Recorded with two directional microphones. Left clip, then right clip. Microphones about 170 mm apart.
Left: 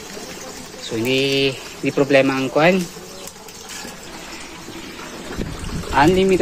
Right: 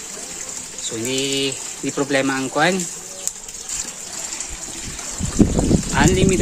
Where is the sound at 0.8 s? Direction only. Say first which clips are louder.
Left 4 dB; 10° right (ahead or behind).